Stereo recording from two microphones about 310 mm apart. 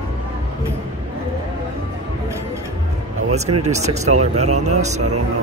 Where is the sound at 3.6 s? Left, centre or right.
Right.